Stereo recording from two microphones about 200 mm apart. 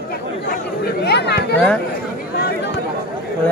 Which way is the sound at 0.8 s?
55° left (ahead or behind).